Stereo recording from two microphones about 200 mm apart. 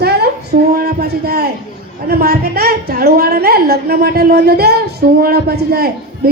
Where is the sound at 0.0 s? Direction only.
55° right (ahead or behind).